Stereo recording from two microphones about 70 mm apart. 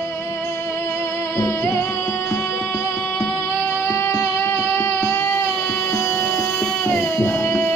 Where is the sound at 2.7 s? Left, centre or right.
Left.